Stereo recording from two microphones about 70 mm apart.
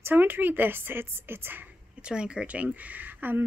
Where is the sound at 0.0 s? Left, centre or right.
Right.